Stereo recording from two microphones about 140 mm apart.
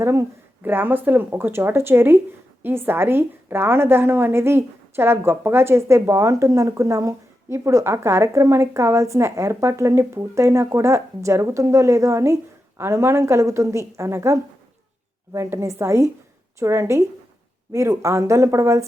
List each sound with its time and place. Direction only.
0.0 s a woman's voice: 20° right (ahead or behind)